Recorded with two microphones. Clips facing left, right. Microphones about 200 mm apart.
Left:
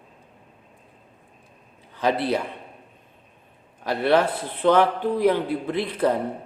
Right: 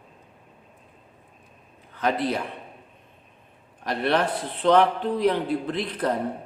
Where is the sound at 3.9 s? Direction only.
10° left (ahead or behind).